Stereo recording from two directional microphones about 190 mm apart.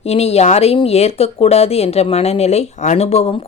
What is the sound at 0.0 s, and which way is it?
Speech, 35° left (ahead or behind).